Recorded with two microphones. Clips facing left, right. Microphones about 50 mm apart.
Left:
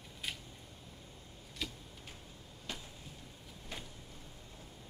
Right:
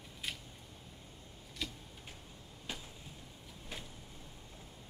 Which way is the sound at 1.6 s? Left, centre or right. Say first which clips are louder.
Even; centre.